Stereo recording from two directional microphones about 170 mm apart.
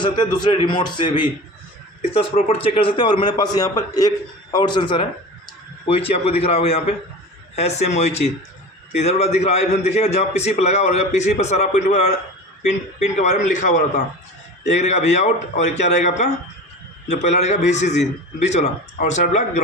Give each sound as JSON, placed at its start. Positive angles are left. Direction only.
{"t": 0.0, "sound": "a man's voice", "side_deg": 25}
{"t": 2.5, "sound": "a man's voice", "side_deg": 30}